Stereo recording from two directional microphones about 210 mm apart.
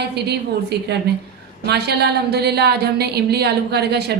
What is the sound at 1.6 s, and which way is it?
A woman's voice, 50° right (ahead or behind).